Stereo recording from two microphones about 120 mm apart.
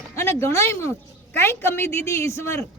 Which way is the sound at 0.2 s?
20° left (ahead or behind).